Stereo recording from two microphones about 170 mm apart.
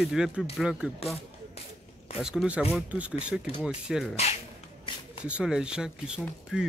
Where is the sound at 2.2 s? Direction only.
5° right (ahead or behind).